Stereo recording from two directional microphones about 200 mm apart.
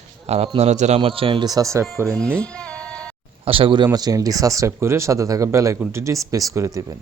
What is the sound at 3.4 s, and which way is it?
Speech, 25° right (ahead or behind).